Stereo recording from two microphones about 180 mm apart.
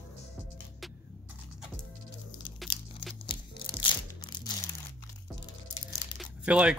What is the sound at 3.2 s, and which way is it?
Music, 25° left (ahead or behind).